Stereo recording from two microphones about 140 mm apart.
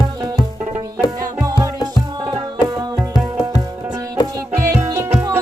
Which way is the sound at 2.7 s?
25° right (ahead or behind).